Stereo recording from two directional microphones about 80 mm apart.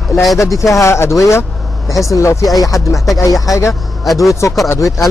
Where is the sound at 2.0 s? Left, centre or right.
Left.